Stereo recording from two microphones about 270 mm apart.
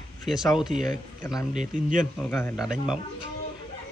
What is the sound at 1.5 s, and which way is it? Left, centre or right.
Speech, right.